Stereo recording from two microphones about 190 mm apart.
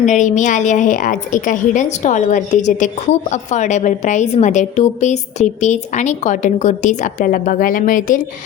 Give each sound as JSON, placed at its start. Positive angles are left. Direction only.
{"t": 0.0, "sound": "a woman's voice", "side_deg": 40}